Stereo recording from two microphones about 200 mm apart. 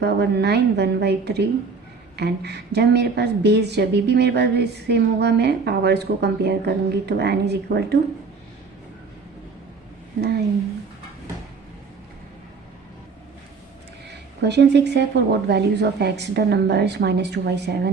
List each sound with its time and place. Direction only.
0.0 s a woman's voice: 55° right (ahead or behind)
14.1 s a woman's voice: 55° right (ahead or behind)